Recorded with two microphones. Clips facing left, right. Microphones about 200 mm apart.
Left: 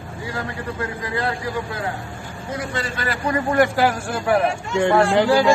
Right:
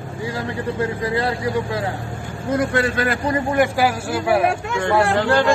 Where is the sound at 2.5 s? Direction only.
55° right (ahead or behind).